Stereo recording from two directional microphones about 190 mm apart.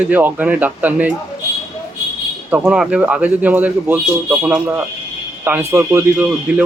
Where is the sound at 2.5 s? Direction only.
5° right (ahead or behind).